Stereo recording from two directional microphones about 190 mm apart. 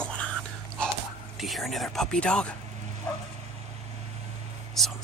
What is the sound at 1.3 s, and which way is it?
Speech, centre (ahead or behind).